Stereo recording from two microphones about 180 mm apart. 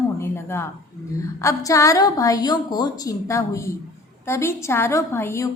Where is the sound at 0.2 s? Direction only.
15° left (ahead or behind).